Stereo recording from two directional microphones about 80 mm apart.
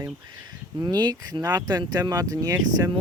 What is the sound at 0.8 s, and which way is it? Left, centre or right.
Speech, right.